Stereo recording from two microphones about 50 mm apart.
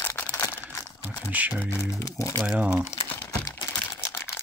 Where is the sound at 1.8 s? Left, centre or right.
Left.